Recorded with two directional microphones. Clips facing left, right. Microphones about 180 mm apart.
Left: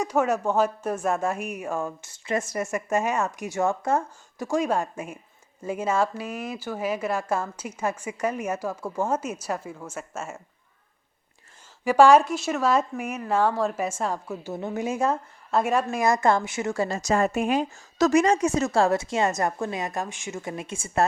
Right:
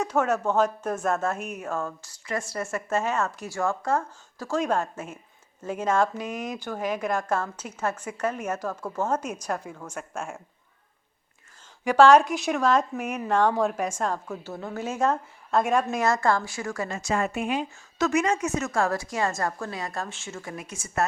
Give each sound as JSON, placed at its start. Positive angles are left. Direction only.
{"t": 0.0, "sound": "speech", "side_deg": 10}
{"t": 11.9, "sound": "speech", "side_deg": 10}
{"t": 14.5, "sound": "speech", "side_deg": 20}
{"t": 17.0, "sound": "a woman's voice", "side_deg": 40}